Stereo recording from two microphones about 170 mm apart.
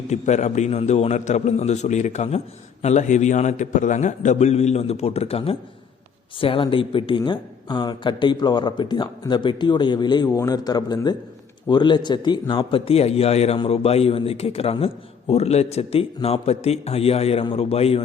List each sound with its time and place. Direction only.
0.1 s a man's voice: 45° left (ahead or behind)